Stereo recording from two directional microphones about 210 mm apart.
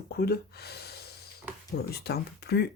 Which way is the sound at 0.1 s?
50° left (ahead or behind).